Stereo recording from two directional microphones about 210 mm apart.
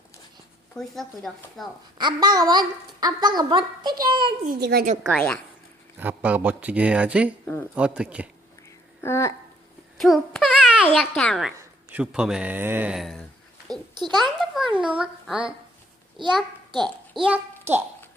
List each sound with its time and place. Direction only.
0.8 s a child's voice: centre (ahead or behind)
2.0 s a woman's voice: 20° right (ahead or behind)
4.4 s speech: 45° right (ahead or behind)
5.0 s a child's voice: 5° left (ahead or behind)
6.0 s a child's voice: 10° right (ahead or behind)
9.0 s speech: 10° left (ahead or behind)
10.0 s a sound: centre (ahead or behind)
10.8 s a child's voice: 5° left (ahead or behind)
11.5 s a man's voice: 10° right (ahead or behind)
13.7 s a child's voice: 20° right (ahead or behind)
14.2 s a child's voice: 5° right (ahead or behind)
16.7 s a child's voice: centre (ahead or behind)